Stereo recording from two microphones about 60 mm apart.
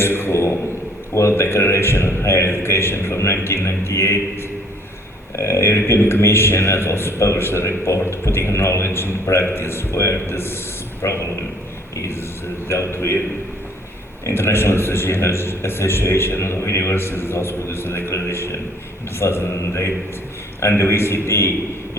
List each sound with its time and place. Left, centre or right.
0.0 s a man's voice: left
12.6 s a man's voice: left
14.3 s a man's voice: left